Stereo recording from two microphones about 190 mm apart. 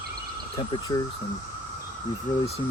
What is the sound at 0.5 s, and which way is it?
Speech, 20° left (ahead or behind).